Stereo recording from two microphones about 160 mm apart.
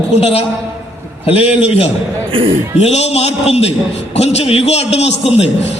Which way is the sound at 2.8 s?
45° left (ahead or behind).